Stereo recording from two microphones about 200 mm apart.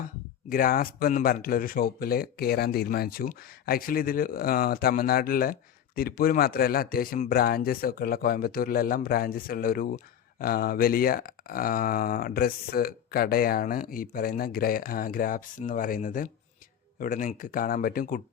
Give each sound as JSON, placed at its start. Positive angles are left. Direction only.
{"t": 0.5, "sound": "speech", "side_deg": 45}